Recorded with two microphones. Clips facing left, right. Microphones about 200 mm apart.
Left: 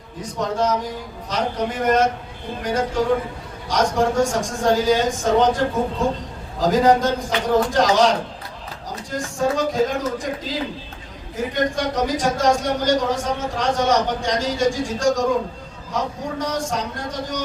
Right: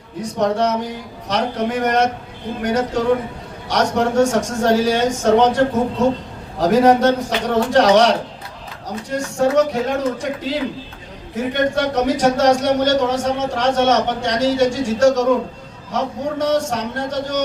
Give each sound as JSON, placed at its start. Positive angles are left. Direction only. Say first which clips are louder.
{"t": 0.3, "sound": "speech", "louder": "right 3 dB", "side_deg": -70}